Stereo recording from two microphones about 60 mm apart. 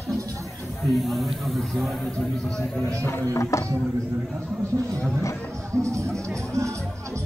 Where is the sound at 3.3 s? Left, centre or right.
Left.